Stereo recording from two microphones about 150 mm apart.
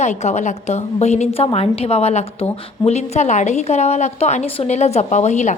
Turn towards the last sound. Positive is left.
turn(degrees=50)  # may be behind; listen again after turning